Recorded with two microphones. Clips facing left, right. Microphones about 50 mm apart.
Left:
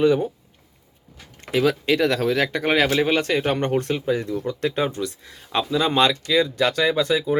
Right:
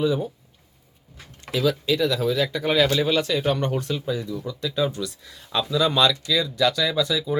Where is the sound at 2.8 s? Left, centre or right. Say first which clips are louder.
Left 1 dB; left.